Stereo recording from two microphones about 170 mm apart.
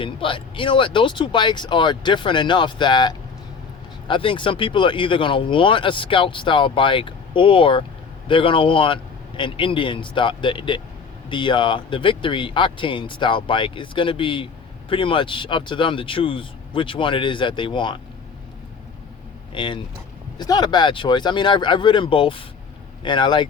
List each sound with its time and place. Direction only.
0.0 s speech: 30° left (ahead or behind)
19.5 s speech: 30° left (ahead or behind)